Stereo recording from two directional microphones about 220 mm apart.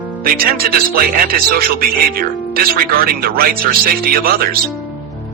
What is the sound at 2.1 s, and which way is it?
Speech, 40° right (ahead or behind).